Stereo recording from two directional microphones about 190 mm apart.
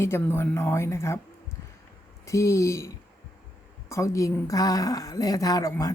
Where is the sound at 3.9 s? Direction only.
15° left (ahead or behind).